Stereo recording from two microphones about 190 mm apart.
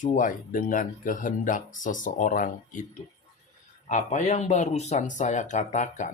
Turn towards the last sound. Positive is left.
turn(degrees=40)  # may be behind; listen again after turning